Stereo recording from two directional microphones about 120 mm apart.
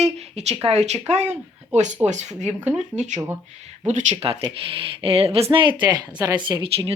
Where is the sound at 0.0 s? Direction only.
65° right (ahead or behind).